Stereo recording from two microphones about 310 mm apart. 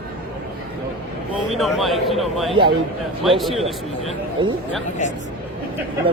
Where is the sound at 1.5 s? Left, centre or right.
Centre.